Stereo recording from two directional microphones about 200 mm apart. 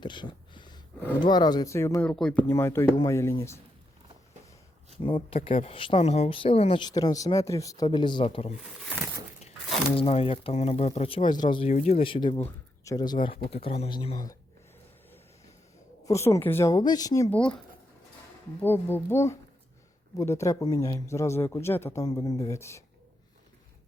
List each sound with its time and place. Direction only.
0.0 s a sound: 25° left (ahead or behind)
1.2 s speech: 20° left (ahead or behind)
5.0 s speech: 25° left (ahead or behind)
9.9 s speech: 30° left (ahead or behind)
11.7 s speech: 35° left (ahead or behind); by 13.1 s 20° left (ahead or behind)
13.2 s speech: 30° left (ahead or behind)
16.0 s speech: 15° left (ahead or behind)
18.6 s speech: 10° left (ahead or behind)